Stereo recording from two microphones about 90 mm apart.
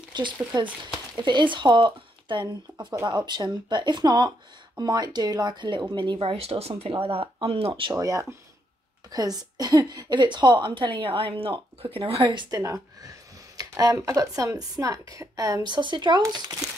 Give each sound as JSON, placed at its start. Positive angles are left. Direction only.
{"t": 0.1, "sound": "a woman's voice", "side_deg": -55}
{"t": 7.9, "sound": "a woman's voice", "side_deg": -40}
{"t": 12.4, "sound": "speech", "side_deg": -35}
{"t": 15.6, "sound": "a woman's voice", "side_deg": -60}